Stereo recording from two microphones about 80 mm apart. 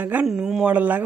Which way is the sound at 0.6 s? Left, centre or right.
Right.